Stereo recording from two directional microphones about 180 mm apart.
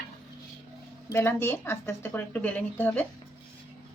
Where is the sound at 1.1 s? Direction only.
10° left (ahead or behind).